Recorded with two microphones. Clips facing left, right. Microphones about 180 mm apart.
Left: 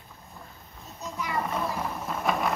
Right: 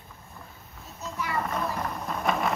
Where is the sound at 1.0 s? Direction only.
15° left (ahead or behind).